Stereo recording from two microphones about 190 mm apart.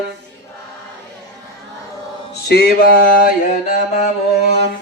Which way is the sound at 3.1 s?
45° left (ahead or behind).